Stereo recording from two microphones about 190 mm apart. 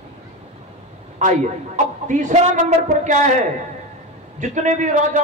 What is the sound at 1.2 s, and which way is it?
A man's voice, 40° right (ahead or behind).